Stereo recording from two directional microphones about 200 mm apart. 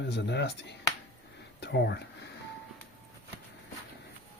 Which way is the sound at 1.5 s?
60° left (ahead or behind).